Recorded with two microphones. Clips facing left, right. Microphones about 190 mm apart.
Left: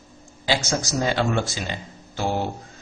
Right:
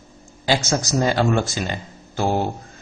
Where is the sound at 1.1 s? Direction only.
45° right (ahead or behind).